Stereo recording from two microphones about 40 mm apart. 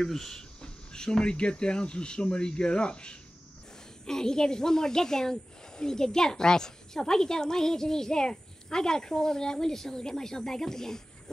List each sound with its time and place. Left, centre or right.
0.0 s speech: centre
0.4 s speech: centre